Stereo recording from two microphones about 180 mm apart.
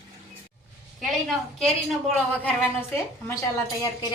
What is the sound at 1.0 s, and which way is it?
A woman's voice, centre (ahead or behind).